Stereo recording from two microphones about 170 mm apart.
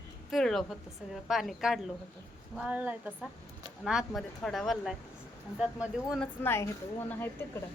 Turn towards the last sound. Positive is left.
turn(degrees=15)  # may be behind; listen again after turning